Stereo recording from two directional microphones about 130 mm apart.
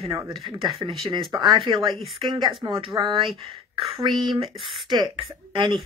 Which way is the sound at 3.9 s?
35° right (ahead or behind).